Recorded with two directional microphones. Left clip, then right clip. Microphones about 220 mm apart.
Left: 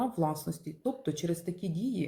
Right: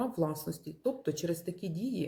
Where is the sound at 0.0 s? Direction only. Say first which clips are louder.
Left 2 dB; 15° right (ahead or behind).